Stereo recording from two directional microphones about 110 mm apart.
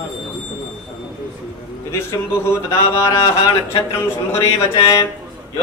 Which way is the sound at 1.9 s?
25° left (ahead or behind).